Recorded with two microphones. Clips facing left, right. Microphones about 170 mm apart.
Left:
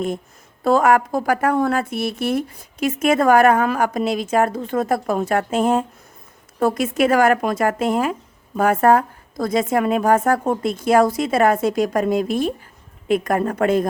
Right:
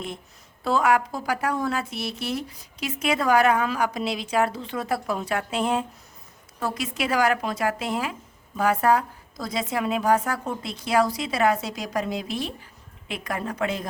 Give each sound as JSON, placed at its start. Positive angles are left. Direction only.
{"t": 0.6, "sound": "speech", "side_deg": 50}